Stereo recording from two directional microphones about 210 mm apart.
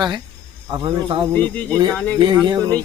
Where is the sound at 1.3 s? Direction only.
5° left (ahead or behind).